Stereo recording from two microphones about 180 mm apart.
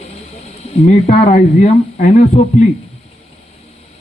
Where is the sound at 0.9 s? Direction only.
40° left (ahead or behind).